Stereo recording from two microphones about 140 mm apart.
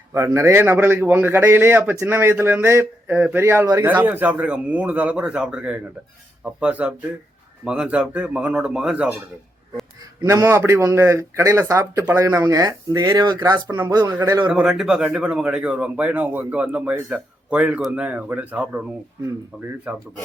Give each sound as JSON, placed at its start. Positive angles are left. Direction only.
{"t": 0.1, "sound": "speech", "side_deg": -20}
{"t": 10.2, "sound": "a man's voice", "side_deg": -20}
{"t": 14.0, "sound": "speech", "side_deg": -15}
{"t": 14.5, "sound": "speech", "side_deg": -5}